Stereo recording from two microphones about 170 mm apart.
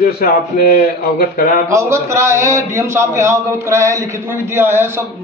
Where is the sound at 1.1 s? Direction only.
60° left (ahead or behind).